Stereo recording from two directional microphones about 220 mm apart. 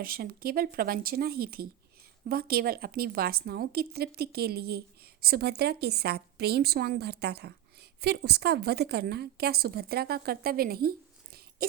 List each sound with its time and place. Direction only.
0.0 s a woman's voice: 40° right (ahead or behind)